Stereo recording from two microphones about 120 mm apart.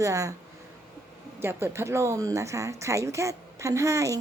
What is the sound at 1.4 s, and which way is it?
A woman's voice, 20° right (ahead or behind).